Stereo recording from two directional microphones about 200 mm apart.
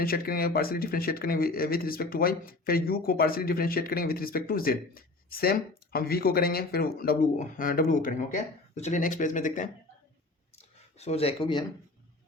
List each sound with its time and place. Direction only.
0.0 s speech: 50° left (ahead or behind)
10.9 s speech: 30° left (ahead or behind)